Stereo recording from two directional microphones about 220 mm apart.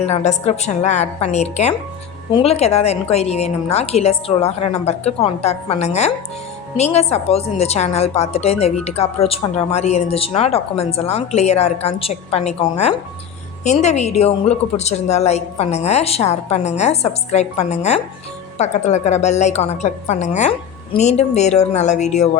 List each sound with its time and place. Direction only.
0.0 s a woman's voice: 30° left (ahead or behind)